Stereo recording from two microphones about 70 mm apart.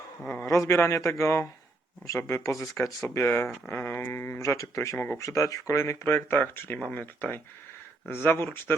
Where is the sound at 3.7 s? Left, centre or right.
Left.